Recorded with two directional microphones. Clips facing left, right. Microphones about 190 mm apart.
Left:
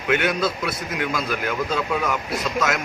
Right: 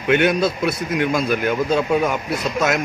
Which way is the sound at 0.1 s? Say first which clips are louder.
Right 5 dB; 25° right (ahead or behind).